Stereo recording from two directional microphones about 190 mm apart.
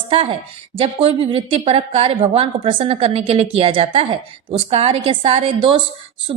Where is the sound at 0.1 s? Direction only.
30° right (ahead or behind).